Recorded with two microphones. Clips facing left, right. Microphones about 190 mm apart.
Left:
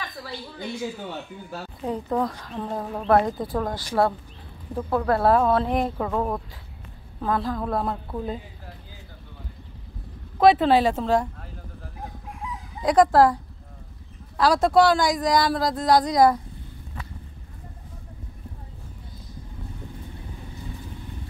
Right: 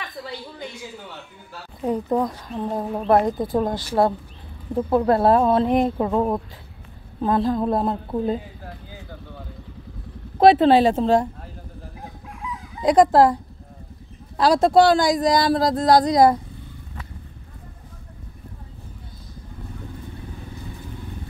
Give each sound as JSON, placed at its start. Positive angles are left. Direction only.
{"t": 1.9, "sound": "speech", "side_deg": -15}
{"t": 10.4, "sound": "speech", "side_deg": -30}
{"t": 12.8, "sound": "speech", "side_deg": -20}